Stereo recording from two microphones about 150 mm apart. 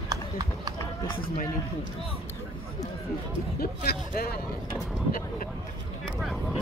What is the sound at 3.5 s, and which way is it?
Music, 90° left.